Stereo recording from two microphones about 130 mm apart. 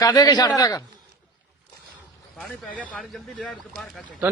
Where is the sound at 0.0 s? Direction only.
30° left (ahead or behind).